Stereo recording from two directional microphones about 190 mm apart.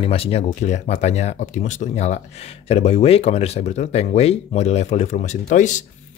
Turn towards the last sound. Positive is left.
turn(degrees=40)  # may be behind; listen again after turning